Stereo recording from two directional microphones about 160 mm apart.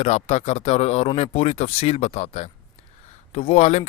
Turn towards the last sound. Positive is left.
turn(degrees=45)  # may be behind; listen again after turning